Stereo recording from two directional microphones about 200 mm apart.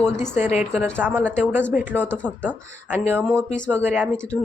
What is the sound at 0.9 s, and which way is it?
Speech, 10° right (ahead or behind).